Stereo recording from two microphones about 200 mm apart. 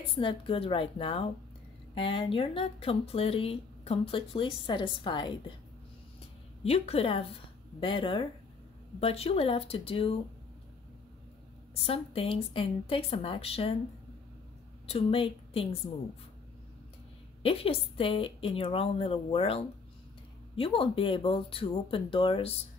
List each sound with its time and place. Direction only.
0.1 s speech: 25° left (ahead or behind)
6.6 s speech: 30° left (ahead or behind)
11.7 s speech: 30° left (ahead or behind)
14.9 s speech: 30° left (ahead or behind)
17.4 s speech: 30° left (ahead or behind)